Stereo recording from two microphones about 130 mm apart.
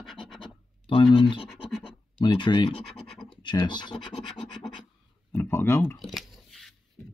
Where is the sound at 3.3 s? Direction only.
35° left (ahead or behind).